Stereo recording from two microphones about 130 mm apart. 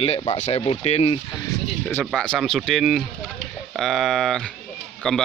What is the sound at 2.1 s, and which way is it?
Speech, centre (ahead or behind).